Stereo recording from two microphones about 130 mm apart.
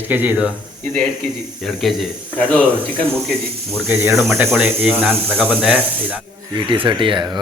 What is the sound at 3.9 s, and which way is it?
Speech, 20° right (ahead or behind).